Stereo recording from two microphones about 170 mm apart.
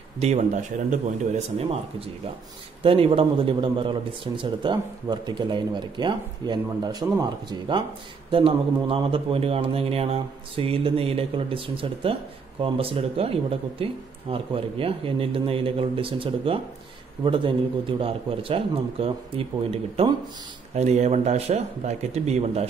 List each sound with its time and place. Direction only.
0.2 s a man's voice: 40° right (ahead or behind)